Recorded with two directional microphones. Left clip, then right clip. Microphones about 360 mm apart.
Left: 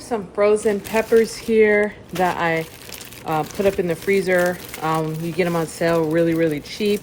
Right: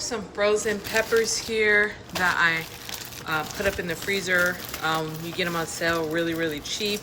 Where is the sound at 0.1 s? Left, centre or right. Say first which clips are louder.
Left 7 dB; centre.